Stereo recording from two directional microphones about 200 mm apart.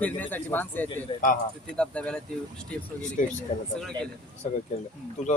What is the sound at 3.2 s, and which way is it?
Speech, 40° left (ahead or behind).